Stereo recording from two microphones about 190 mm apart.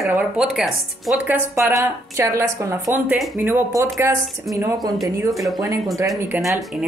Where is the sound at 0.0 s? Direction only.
5° right (ahead or behind).